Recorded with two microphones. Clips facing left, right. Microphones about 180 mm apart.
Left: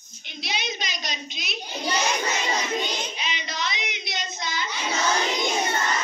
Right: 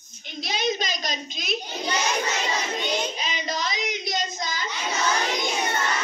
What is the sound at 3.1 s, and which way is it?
Speech, 45° right (ahead or behind).